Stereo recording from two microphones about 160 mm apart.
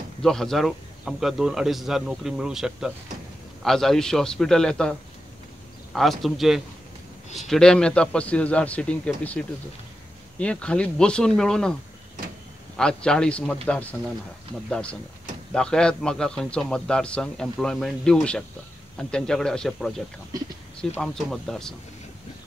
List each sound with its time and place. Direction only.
0.2 s a man's voice: 5° left (ahead or behind)
5.9 s a man's voice: centre (ahead or behind)
12.7 s a man's voice: 5° left (ahead or behind)
21.0 s a man's voice: 5° left (ahead or behind)